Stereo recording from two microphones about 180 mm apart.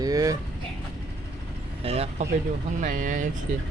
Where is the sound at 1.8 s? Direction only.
35° right (ahead or behind).